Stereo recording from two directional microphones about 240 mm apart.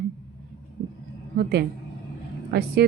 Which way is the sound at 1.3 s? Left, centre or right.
Right.